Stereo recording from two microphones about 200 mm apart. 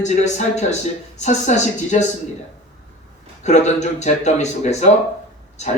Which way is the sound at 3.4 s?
35° left (ahead or behind).